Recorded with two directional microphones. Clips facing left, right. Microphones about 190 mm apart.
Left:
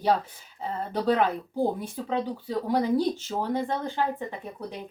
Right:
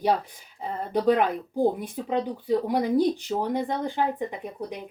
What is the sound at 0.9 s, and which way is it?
Speech, 15° right (ahead or behind).